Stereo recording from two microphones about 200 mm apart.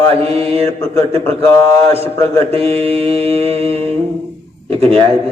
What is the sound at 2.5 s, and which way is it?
Mantra, 30° right (ahead or behind).